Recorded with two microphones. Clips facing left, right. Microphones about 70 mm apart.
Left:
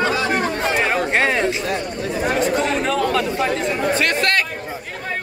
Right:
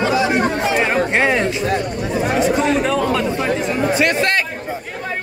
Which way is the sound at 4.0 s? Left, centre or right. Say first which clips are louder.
Right 2 dB; centre.